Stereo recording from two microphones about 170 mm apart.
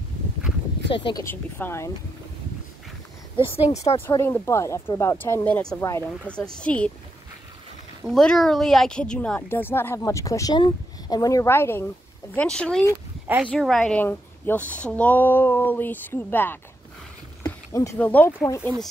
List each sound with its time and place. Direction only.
0.8 s speech: 30° left (ahead or behind)
1.2 s a woman's voice: 15° left (ahead or behind)
3.3 s speech: 35° left (ahead or behind)
4.1 s a woman's voice: 15° left (ahead or behind)
8.1 s a woman's voice: 5° left (ahead or behind)